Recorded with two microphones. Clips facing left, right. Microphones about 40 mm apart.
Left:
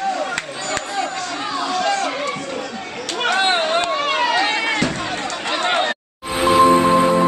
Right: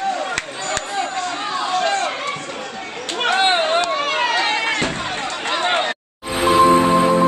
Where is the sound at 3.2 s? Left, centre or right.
Centre.